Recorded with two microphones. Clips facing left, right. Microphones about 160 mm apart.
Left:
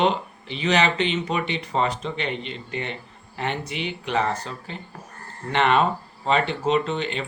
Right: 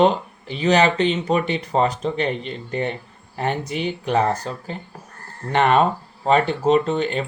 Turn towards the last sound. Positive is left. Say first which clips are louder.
# right 5 dB
turn(degrees=-45)  # may be behind; listen again after turning